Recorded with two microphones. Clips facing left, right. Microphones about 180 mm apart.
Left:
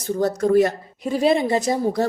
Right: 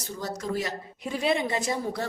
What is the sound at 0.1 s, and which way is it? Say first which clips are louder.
Speech: left 13 dB; 55° left (ahead or behind).